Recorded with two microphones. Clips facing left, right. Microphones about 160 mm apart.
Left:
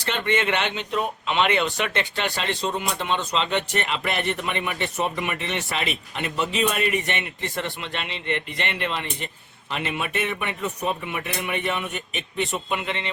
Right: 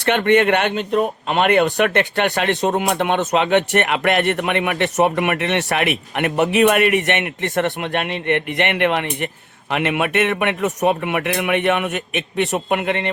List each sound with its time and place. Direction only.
0.0 s speech: 60° right (ahead or behind)